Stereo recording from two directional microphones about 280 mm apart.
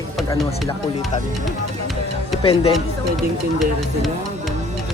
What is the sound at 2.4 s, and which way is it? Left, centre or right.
Speech, centre.